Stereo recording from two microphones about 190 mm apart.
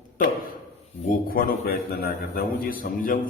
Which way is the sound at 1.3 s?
50° left (ahead or behind).